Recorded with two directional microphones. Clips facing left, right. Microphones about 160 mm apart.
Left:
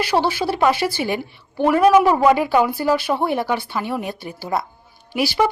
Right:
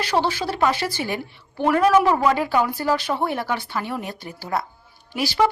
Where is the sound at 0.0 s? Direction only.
10° left (ahead or behind).